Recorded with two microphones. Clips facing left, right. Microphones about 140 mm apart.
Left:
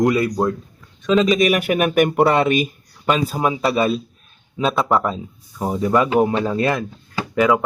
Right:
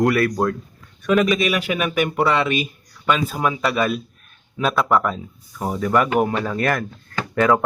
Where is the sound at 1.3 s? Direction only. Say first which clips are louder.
Left 4 dB; 45° left (ahead or behind); by 6.9 s 20° left (ahead or behind).